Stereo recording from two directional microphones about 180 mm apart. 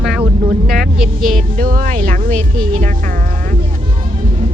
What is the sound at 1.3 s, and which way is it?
Speech, 50° right (ahead or behind).